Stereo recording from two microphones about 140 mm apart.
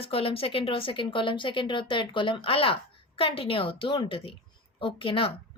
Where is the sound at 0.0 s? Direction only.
45° left (ahead or behind).